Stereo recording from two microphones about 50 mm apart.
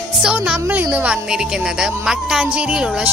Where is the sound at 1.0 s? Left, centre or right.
Centre.